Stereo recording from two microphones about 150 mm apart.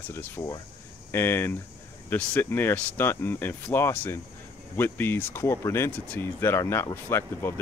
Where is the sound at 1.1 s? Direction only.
15° left (ahead or behind).